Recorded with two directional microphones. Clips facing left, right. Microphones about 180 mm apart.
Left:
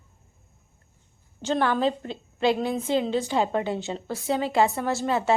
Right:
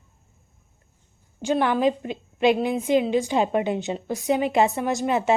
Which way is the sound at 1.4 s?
15° right (ahead or behind).